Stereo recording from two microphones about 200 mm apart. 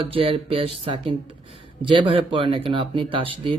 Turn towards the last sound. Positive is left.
turn(degrees=-25)  # may be behind; listen again after turning